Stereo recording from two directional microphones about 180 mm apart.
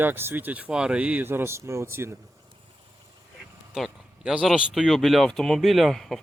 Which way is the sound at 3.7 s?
5° right (ahead or behind).